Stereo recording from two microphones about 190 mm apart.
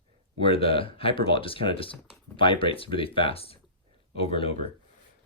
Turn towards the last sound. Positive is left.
turn(degrees=30)  # may be behind; listen again after turning